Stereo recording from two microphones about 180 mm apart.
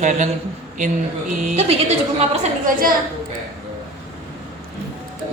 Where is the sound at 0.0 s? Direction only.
45° right (ahead or behind).